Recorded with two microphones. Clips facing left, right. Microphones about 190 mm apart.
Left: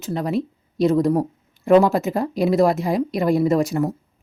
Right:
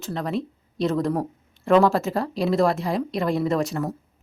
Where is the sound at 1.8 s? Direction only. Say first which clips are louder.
Left 2 dB; 20° left (ahead or behind).